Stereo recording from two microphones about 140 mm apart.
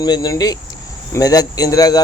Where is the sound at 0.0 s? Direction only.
30° left (ahead or behind).